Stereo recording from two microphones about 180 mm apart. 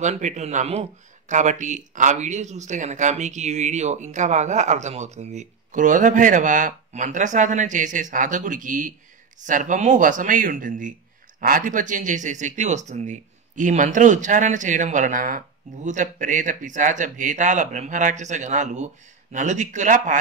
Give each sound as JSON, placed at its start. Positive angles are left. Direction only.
{"t": 0.0, "sound": "speech", "side_deg": -40}